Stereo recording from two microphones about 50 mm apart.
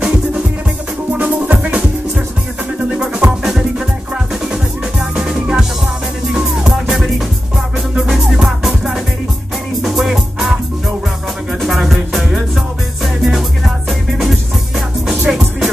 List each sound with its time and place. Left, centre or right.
0.0 s music: centre
1.1 s music: right
5.1 s music: centre
11.6 s music: centre